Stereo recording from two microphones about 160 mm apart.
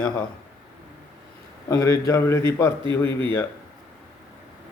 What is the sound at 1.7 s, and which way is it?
A man's voice, 20° left (ahead or behind).